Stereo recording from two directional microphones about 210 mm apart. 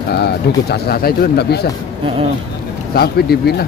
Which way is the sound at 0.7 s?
45° left (ahead or behind).